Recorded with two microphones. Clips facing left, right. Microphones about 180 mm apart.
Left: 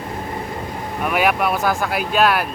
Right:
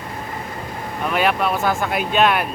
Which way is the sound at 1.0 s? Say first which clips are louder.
Left 1 dB; 10° left (ahead or behind).